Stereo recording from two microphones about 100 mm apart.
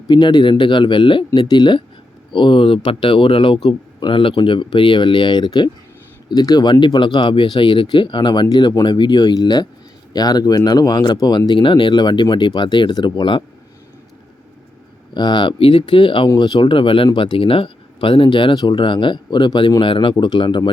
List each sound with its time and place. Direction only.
0.1 s a man's voice: 45° left (ahead or behind)
8.4 s speech: 40° left (ahead or behind)
15.1 s a man's voice: 50° left (ahead or behind)